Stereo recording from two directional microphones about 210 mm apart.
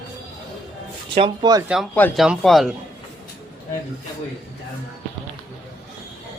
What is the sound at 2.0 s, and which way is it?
Speech, 10° left (ahead or behind).